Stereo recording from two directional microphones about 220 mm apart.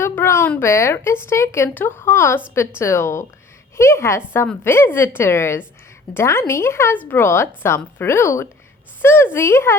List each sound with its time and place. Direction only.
0.0 s a woman's voice: 10° left (ahead or behind)